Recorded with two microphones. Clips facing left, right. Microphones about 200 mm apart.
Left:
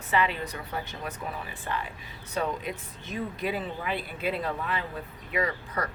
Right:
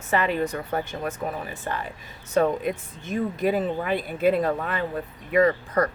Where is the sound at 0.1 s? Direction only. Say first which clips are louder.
Right 4 dB; 50° right (ahead or behind).